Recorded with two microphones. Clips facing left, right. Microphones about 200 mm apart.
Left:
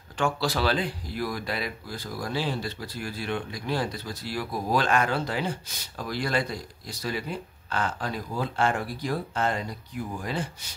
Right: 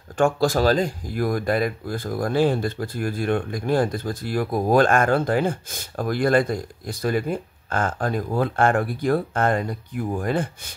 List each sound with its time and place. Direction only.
0.2 s speech: 45° right (ahead or behind)